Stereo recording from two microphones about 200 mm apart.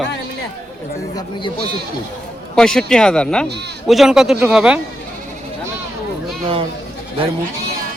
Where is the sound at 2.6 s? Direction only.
5° left (ahead or behind).